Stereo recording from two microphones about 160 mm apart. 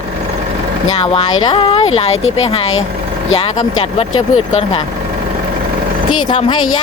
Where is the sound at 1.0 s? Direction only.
35° left (ahead or behind).